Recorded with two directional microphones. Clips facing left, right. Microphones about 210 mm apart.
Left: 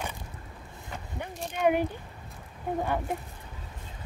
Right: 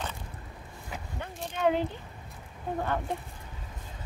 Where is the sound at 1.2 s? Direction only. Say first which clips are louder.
Left 2 dB; 15° left (ahead or behind).